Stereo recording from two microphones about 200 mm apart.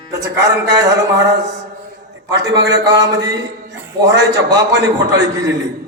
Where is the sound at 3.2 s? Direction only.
60° right (ahead or behind).